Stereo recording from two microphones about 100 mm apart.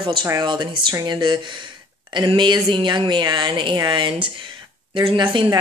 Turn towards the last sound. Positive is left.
turn(degrees=-55)  # may be behind; listen again after turning